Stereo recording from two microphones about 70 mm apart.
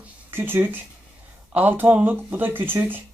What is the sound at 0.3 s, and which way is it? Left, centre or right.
Speech, right.